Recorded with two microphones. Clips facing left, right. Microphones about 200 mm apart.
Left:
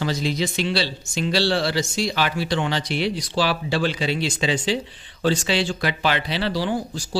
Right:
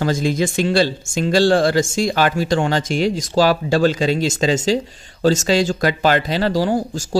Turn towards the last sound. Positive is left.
turn(degrees=-45)  # may be behind; listen again after turning